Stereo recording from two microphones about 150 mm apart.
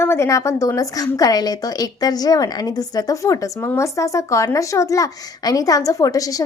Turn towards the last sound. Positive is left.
turn(degrees=25)  # may be behind; listen again after turning